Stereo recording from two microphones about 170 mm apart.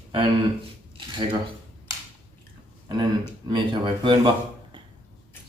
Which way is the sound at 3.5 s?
30° right (ahead or behind).